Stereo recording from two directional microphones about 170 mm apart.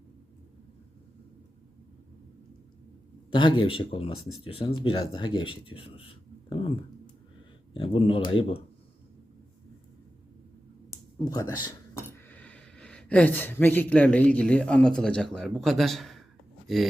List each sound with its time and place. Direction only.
3.3 s speech: 30° left (ahead or behind)
11.3 s speech: 20° left (ahead or behind)
12.3 s speech: 10° left (ahead or behind)